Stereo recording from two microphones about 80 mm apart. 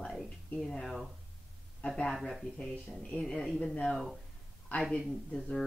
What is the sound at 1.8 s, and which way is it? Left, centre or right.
Speech, centre.